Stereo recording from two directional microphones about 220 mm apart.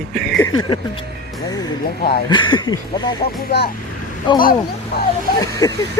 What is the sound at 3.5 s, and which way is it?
Speech, 45° left (ahead or behind).